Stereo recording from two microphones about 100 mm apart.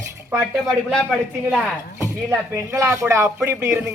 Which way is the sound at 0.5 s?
Centre (ahead or behind).